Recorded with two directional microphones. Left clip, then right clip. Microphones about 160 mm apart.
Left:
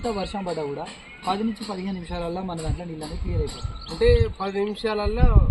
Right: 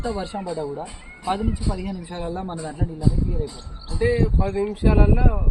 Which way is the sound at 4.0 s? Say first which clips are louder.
Left 2 dB; 20° right (ahead or behind).